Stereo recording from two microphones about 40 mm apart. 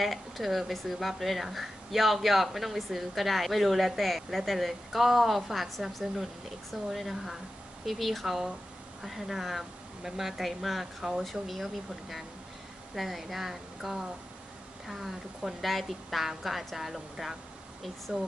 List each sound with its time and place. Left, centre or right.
0.0 s a woman's voice: centre
18.1 s speech: right